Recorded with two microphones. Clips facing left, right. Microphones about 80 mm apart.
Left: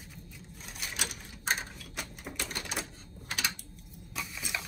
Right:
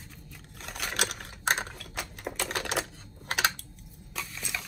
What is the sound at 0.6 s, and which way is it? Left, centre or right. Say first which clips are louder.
Typewriter: right 7 dB; right.